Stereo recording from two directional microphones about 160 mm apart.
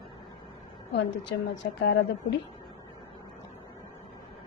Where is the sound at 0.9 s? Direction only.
90° left.